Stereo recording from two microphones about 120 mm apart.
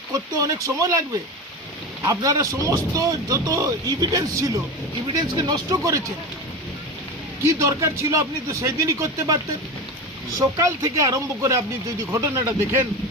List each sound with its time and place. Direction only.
0.1 s speech: 30° right (ahead or behind)
2.0 s speech: 25° right (ahead or behind)
5.4 s speech: 35° right (ahead or behind)
7.4 s speech: 25° right (ahead or behind)